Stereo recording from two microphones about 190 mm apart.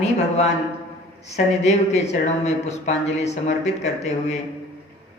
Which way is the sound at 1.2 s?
35° left (ahead or behind).